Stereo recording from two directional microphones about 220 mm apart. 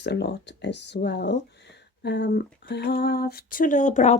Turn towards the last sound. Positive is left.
turn(degrees=30)  # may be behind; listen again after turning